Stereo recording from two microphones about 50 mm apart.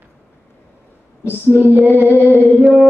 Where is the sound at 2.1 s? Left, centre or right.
Left.